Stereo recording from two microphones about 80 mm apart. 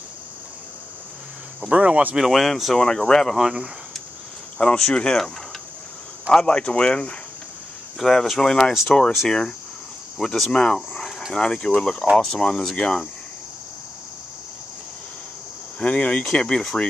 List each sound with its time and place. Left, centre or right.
1.7 s speech: centre
2.1 s speech: centre
3.3 s speech: centre
4.6 s speech: centre
6.3 s speech: centre
10.1 s speech: centre
15.8 s speech: centre